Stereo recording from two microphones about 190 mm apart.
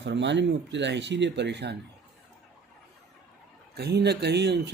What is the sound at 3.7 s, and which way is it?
A man's voice, 60° right (ahead or behind).